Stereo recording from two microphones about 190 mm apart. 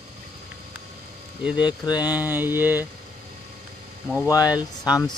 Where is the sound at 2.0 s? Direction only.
10° right (ahead or behind).